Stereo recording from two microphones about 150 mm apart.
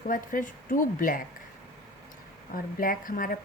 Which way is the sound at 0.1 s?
60° left (ahead or behind).